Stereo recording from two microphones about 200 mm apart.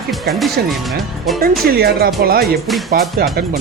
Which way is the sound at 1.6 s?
55° right (ahead or behind).